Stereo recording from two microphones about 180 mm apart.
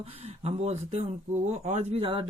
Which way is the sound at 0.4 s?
35° right (ahead or behind).